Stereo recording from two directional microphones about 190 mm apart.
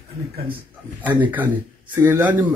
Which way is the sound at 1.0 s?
10° right (ahead or behind).